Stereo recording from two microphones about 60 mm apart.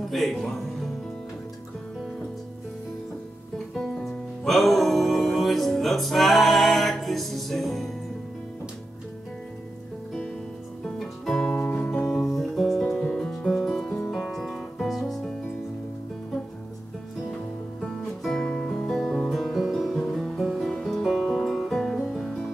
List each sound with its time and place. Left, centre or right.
0.0 s speech: centre
0.5 s music: centre
3.5 s music: centre
10.8 s music: centre
11.5 s music: left
12.1 s music: centre
13.8 s music: left
14.1 s music: centre
17.3 s music: centre
18.9 s guitar: centre
20.7 s music: centre